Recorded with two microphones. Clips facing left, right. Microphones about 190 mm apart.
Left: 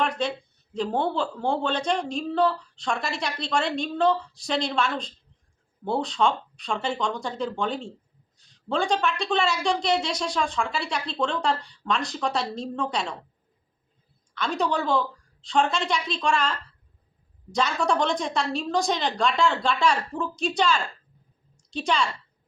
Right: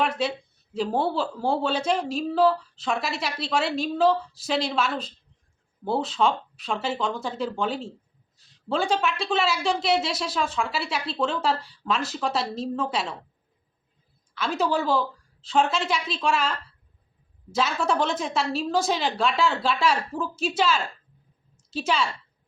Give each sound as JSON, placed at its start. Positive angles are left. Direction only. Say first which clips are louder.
{"t": 0.0, "sound": "speech", "louder": "right 1 dB", "side_deg": -5}
{"t": 14.3, "sound": "speech", "louder": "right 1 dB", "side_deg": -5}
{"t": 21.5, "sound": "a sound", "louder": "even", "side_deg": -5}